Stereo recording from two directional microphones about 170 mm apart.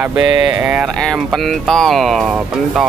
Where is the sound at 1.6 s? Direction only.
5° left (ahead or behind).